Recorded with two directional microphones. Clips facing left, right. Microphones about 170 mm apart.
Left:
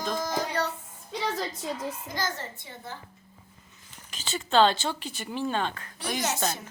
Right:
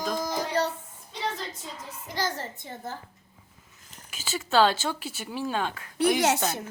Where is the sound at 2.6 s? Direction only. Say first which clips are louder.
Right 4 dB; 40° right (ahead or behind).